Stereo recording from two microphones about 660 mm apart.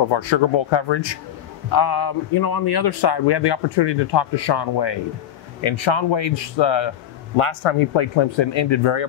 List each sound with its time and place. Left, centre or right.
0.1 s a man's voice: left